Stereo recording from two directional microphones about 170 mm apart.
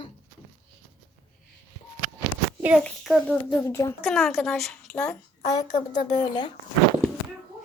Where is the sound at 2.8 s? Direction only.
5° left (ahead or behind).